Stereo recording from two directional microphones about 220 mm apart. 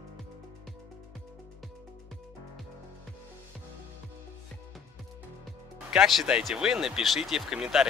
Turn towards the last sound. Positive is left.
turn(degrees=0)  # may be behind; listen again after turning